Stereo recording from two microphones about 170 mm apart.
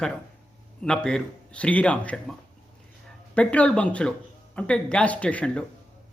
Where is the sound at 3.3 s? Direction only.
10° left (ahead or behind).